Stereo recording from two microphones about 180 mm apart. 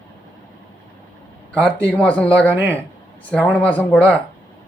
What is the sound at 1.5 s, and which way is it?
Speech, 5° left (ahead or behind).